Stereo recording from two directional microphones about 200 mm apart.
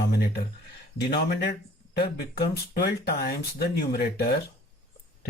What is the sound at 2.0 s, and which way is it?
Speech, 50° left (ahead or behind).